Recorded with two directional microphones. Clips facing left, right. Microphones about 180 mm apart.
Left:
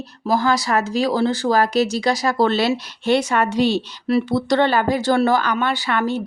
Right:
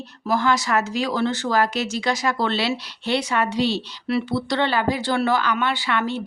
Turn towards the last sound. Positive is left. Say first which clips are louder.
# left 3 dB
turn(degrees=45)  # may be behind; listen again after turning